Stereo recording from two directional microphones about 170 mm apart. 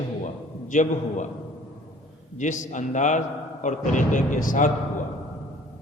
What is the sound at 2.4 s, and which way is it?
A man's voice, 45° left (ahead or behind).